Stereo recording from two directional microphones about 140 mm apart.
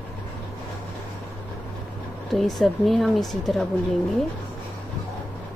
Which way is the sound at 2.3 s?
Centre (ahead or behind).